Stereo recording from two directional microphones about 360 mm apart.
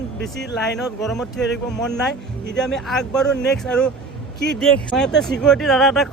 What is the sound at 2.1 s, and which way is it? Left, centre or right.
Speech, left.